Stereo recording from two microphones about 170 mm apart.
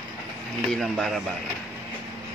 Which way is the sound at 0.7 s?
Centre (ahead or behind).